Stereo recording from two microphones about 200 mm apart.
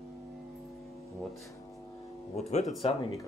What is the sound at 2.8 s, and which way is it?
Speech, 30° left (ahead or behind).